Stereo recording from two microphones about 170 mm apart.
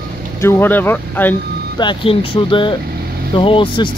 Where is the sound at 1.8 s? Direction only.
30° left (ahead or behind).